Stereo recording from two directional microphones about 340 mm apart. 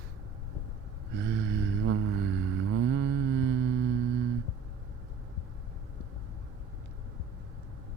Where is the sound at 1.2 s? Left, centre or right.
Right.